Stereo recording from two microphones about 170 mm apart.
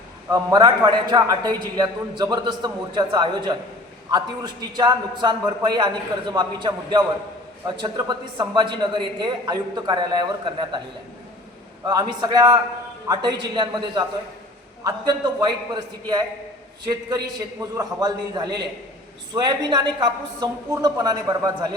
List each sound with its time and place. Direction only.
0.3 s a man's voice: 25° right (ahead or behind)
11.9 s a man's voice: 25° right (ahead or behind)